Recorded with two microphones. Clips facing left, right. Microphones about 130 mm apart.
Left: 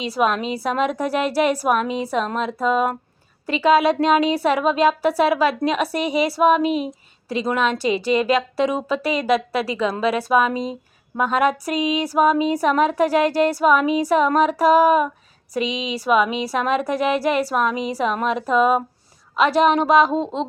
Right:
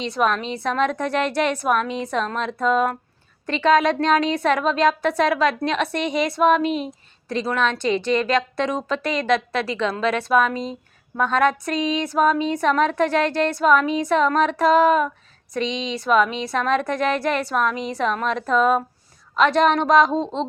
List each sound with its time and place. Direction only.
0.0 s a woman's voice: 5° left (ahead or behind)